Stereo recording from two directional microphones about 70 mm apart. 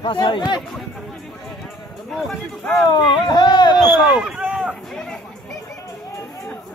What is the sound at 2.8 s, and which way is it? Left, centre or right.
Speech, left.